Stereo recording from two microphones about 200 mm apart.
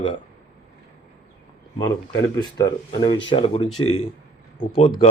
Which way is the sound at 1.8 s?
20° left (ahead or behind).